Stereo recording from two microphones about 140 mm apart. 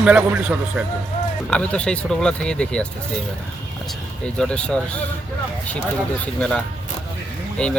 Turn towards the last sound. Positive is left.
turn(degrees=5)  # may be behind; listen again after turning